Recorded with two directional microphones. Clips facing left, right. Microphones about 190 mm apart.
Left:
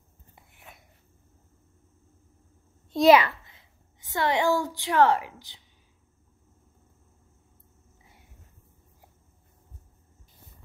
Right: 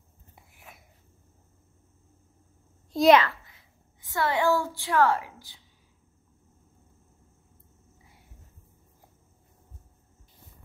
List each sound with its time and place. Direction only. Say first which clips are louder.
0.4 s a sound: even; centre (ahead or behind)
2.9 s a child's voice: left 1 dB; centre (ahead or behind)
3.2 s a woman's voice: even; 20° left (ahead or behind)